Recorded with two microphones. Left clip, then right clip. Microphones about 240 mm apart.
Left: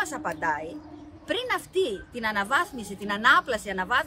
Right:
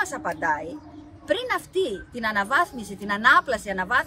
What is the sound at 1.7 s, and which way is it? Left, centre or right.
Speech, right.